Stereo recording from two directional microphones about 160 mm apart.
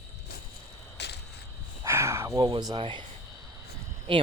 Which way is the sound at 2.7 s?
30° right (ahead or behind).